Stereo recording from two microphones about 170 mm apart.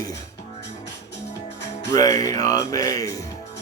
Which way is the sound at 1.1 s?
90° left.